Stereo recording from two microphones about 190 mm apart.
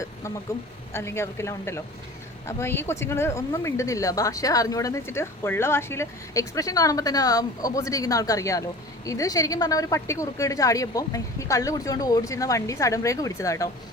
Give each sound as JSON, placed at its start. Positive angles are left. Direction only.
{"t": 0.9, "sound": "speech", "side_deg": 15}